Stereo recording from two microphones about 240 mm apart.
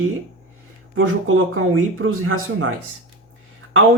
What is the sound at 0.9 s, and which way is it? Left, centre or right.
Speech, right.